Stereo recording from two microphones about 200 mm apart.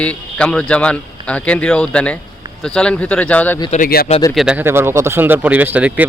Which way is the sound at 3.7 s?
45° left (ahead or behind).